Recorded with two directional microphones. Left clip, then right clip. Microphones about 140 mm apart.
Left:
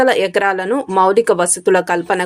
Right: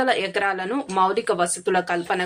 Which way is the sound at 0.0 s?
40° left (ahead or behind).